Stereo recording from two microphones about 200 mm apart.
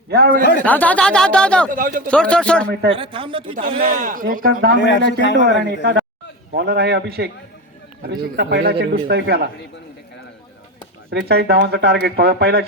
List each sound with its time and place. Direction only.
0.1 s speech: 50° right (ahead or behind)
0.6 s speech: 5° left (ahead or behind)
1.7 s speech: 45° right (ahead or behind)
2.0 s speech: 5° left (ahead or behind)
2.9 s speech: 25° right (ahead or behind)
3.5 s speech: 45° right (ahead or behind)
4.8 s a man's voice: 60° left (ahead or behind)
6.5 s a man's voice: 55° right (ahead or behind)
11.1 s speech: 55° right (ahead or behind)